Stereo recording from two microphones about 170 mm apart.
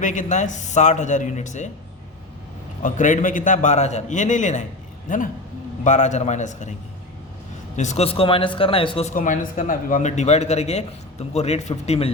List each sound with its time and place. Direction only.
0.0 s a man's voice: 45° left (ahead or behind)
2.8 s a man's voice: 50° left (ahead or behind)
7.8 s speech: 40° left (ahead or behind)
9.0 s speech: 50° left (ahead or behind); by 12.1 s 35° left (ahead or behind)